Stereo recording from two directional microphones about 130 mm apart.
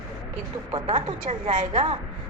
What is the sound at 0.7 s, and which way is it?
Speech, 45° right (ahead or behind).